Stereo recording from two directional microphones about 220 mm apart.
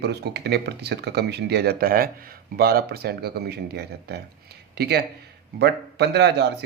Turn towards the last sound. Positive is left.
turn(degrees=-50)  # may be behind; listen again after turning